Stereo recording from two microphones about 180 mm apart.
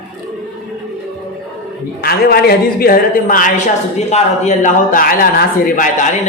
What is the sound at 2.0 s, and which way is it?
A man's voice, 60° left (ahead or behind).